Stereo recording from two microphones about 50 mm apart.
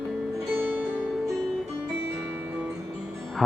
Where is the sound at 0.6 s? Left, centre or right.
Right.